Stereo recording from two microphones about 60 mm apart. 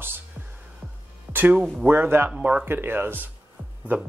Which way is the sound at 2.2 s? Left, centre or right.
Centre.